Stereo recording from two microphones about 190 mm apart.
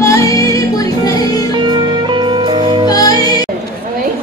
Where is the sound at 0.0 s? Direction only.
15° left (ahead or behind).